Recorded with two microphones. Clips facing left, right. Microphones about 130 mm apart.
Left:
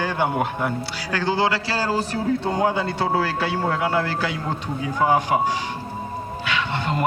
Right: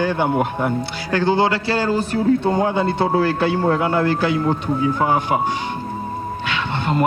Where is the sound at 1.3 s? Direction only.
25° right (ahead or behind).